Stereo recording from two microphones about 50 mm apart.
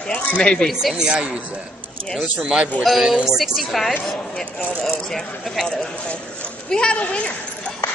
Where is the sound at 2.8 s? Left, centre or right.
Centre.